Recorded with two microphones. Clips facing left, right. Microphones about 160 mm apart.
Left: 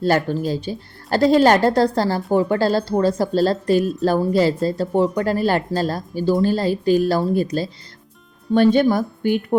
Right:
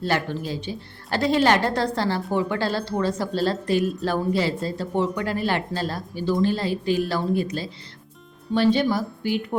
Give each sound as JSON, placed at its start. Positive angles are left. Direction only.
{"t": 0.0, "sound": "a woman's voice", "side_deg": 40}
{"t": 8.5, "sound": "speech", "side_deg": 50}